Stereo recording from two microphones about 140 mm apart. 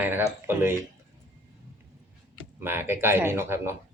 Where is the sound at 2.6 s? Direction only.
15° right (ahead or behind).